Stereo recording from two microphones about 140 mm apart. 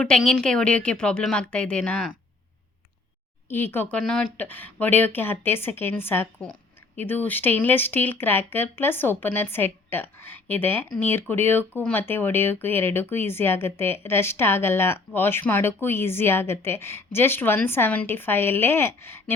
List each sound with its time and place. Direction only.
0.2 s speech: 5° left (ahead or behind)
3.5 s speech: 15° left (ahead or behind)
3.9 s speech: 5° left (ahead or behind)